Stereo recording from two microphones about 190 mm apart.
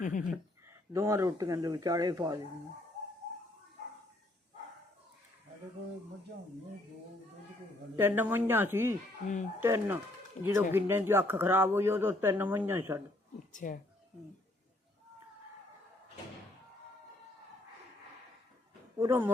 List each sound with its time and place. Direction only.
0.0 s speech: 45° left (ahead or behind)
0.7 s speech: 15° right (ahead or behind)
7.9 s speech: 10° right (ahead or behind)
13.5 s speech: 45° left (ahead or behind)
18.9 s speech: 15° right (ahead or behind)